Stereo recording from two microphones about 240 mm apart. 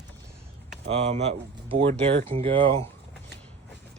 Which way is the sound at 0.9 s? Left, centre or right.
Right.